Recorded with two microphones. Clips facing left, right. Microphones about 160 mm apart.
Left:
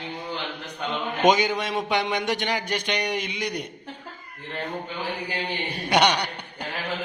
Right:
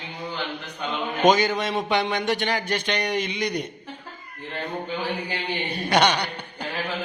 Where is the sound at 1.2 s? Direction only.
15° left (ahead or behind).